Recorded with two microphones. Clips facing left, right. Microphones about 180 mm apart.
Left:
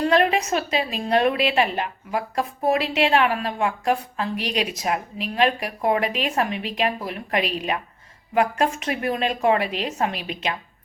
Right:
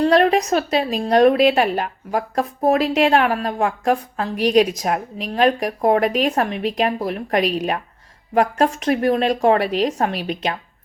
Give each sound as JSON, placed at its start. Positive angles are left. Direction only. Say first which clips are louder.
{"t": 0.0, "sound": "a woman's voice", "louder": "right 4 dB", "side_deg": -35}